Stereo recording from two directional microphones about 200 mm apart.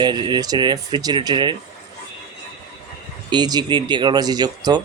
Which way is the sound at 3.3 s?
20° right (ahead or behind).